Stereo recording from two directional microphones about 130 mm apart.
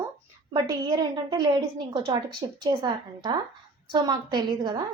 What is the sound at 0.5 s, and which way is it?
Speech, 30° right (ahead or behind).